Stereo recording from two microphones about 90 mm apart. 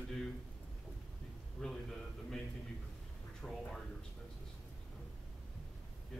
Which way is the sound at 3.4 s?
10° left (ahead or behind).